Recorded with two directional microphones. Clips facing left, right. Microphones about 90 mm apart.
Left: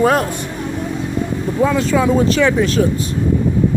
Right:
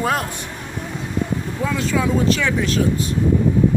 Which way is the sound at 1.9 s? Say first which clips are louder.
Left 4 dB; 35° left (ahead or behind).